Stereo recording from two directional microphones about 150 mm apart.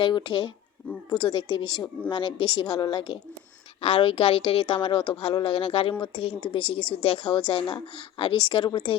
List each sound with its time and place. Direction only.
0.0 s speech: 35° left (ahead or behind)